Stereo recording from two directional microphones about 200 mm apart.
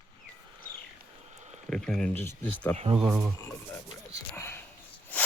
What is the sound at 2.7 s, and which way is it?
Speech, 30° right (ahead or behind).